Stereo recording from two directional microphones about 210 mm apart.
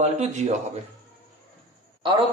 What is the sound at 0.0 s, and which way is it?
Speech, 35° right (ahead or behind).